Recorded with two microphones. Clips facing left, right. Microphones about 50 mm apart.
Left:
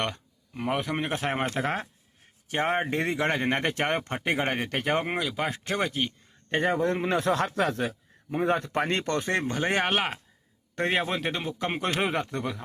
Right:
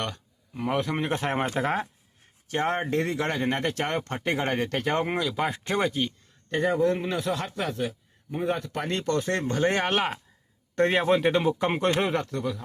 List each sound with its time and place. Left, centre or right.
0.0 s a man's voice: centre
2.5 s speech: centre
2.8 s a man's voice: left; by 5.9 s centre
5.9 s speech: centre
6.5 s speech: left
7.0 s speech: left
9.2 s a man's voice: centre
11.9 s speech: centre
12.3 s speech: left